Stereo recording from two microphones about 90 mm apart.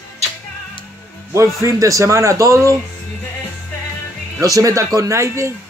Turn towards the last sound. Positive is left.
turn(degrees=-30)  # may be behind; listen again after turning